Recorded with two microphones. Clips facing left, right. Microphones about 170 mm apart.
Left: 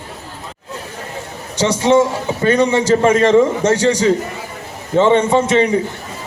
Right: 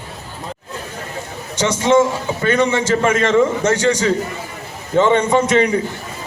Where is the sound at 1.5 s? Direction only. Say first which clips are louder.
Left 1 dB; 35° left (ahead or behind).